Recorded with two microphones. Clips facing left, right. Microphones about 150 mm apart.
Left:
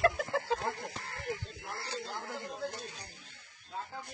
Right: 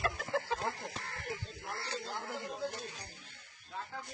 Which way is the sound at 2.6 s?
20° right (ahead or behind).